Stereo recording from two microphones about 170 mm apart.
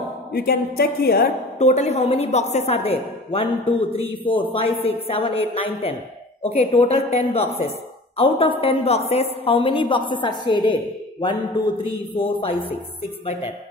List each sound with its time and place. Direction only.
0.3 s a woman's voice: 60° left (ahead or behind)
1.6 s a woman's voice: 40° left (ahead or behind)